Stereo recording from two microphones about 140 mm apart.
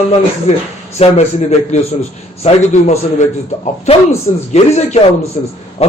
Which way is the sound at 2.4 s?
50° left (ahead or behind).